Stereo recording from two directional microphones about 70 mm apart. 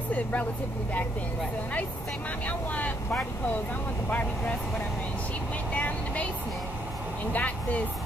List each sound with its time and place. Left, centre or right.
0.1 s vehicle: left
2.4 s speech: left
5.7 s vehicle: left
7.3 s speech: left